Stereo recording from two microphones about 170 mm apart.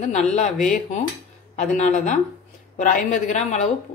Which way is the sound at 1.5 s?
45° left (ahead or behind).